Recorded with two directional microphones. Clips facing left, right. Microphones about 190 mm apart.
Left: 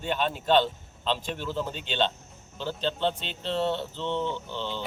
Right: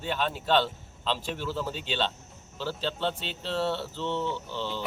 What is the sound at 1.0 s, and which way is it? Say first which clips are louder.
Speech: left 1 dB; 5° right (ahead or behind).